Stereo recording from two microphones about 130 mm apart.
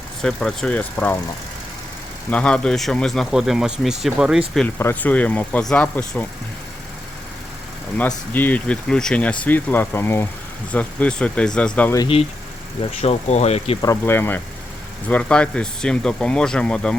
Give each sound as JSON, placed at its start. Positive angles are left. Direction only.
{"t": 0.2, "sound": "speech", "side_deg": 5}
{"t": 2.3, "sound": "speech", "side_deg": 10}
{"t": 4.8, "sound": "speech", "side_deg": 15}
{"t": 7.9, "sound": "speech", "side_deg": 15}
{"t": 12.8, "sound": "speech", "side_deg": 55}
{"t": 13.8, "sound": "speech", "side_deg": 20}